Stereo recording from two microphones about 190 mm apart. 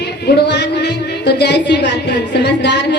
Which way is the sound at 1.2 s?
65° left (ahead or behind).